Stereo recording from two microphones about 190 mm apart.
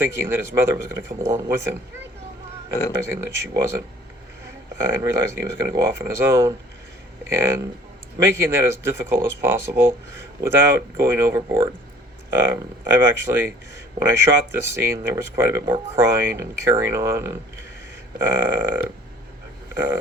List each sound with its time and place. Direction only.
0.0 s speech: 15° right (ahead or behind)
3.0 s speech: 15° right (ahead or behind)
8.2 s speech: 15° right (ahead or behind)
19.7 s a sound: 15° right (ahead or behind)